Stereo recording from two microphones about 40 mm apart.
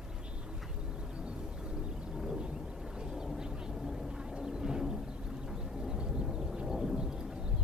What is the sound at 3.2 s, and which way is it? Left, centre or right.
Vehicle, centre.